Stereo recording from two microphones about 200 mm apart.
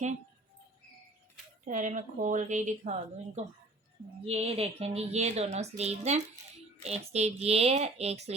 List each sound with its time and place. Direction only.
1.6 s speech: 40° right (ahead or behind)
4.3 s speech: 30° right (ahead or behind)